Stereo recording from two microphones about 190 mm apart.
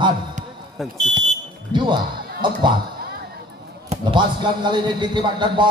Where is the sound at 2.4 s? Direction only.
25° right (ahead or behind).